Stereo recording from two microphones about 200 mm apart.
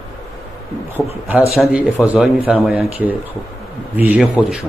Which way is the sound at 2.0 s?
15° left (ahead or behind).